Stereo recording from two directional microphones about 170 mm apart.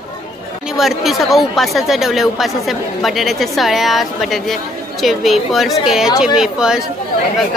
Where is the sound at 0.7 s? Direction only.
Centre (ahead or behind).